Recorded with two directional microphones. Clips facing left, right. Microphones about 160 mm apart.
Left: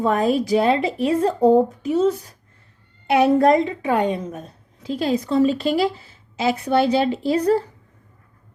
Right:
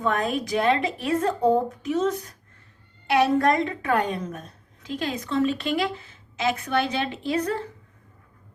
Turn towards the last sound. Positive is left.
turn(degrees=35)  # may be behind; listen again after turning